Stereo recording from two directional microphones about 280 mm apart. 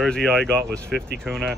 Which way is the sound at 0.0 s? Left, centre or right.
Centre.